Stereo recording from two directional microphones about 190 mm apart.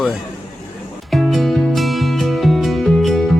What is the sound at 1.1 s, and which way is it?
Music, centre (ahead or behind).